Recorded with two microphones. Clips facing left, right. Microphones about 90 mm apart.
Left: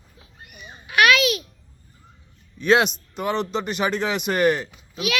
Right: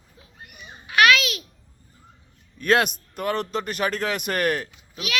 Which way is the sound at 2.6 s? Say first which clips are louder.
Left 2 dB; centre (ahead or behind).